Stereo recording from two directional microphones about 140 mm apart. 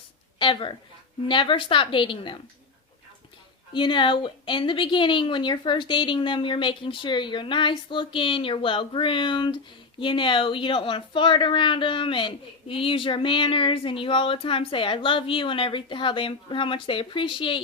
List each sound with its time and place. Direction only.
0.3 s a woman's voice: 40° left (ahead or behind)
3.7 s a woman's voice: 35° left (ahead or behind)